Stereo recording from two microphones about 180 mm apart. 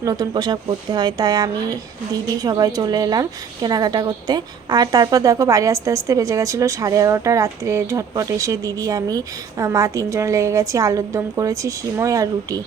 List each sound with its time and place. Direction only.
0.0 s a woman's voice: 20° right (ahead or behind)